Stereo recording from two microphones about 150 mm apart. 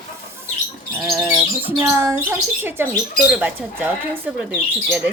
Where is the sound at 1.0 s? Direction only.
15° right (ahead or behind).